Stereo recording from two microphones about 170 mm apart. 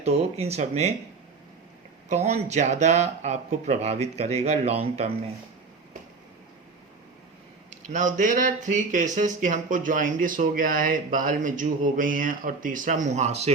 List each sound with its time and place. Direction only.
0.0 s speech: 40° right (ahead or behind)
2.0 s speech: 40° right (ahead or behind)
7.7 s speech: 45° right (ahead or behind)